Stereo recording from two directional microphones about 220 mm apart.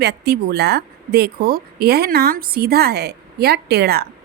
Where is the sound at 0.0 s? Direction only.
50° right (ahead or behind).